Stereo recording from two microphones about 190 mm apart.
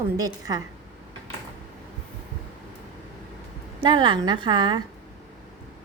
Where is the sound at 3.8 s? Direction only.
25° right (ahead or behind).